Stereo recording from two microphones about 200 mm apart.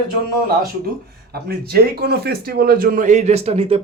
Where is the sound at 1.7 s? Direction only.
50° right (ahead or behind).